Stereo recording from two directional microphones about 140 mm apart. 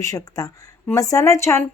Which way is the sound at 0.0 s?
25° left (ahead or behind).